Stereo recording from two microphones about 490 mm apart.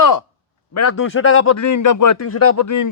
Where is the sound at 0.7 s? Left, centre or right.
Left.